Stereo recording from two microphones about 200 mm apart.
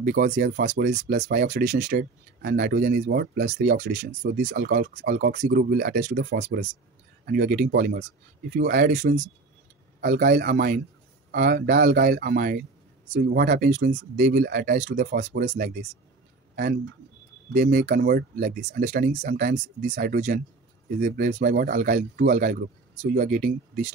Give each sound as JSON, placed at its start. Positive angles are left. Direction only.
{"t": 0.0, "sound": "speech", "side_deg": -45}
{"t": 3.5, "sound": "speech", "side_deg": -40}
{"t": 15.1, "sound": "speech", "side_deg": -60}
{"t": 15.5, "sound": "speech", "side_deg": -40}
{"t": 17.5, "sound": "speech", "side_deg": -40}